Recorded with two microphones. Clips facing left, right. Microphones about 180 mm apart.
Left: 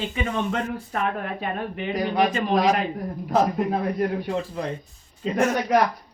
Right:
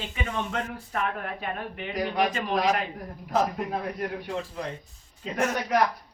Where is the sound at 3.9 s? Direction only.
30° left (ahead or behind).